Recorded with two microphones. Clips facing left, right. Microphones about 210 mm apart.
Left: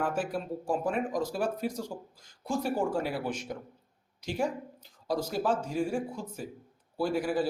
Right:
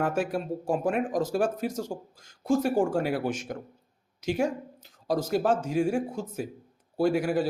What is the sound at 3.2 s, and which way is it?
Speech, 45° right (ahead or behind).